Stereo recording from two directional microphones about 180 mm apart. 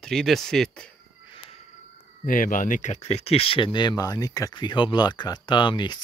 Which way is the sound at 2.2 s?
50° left (ahead or behind).